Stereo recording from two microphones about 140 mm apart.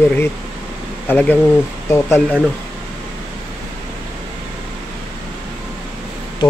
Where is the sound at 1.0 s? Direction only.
15° left (ahead or behind).